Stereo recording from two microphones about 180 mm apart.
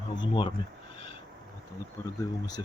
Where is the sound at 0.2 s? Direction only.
30° left (ahead or behind).